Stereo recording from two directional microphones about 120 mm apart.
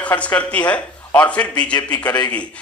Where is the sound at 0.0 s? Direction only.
10° left (ahead or behind).